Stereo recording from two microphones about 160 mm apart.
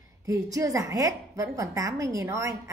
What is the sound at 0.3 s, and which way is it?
A woman's voice, 20° right (ahead or behind).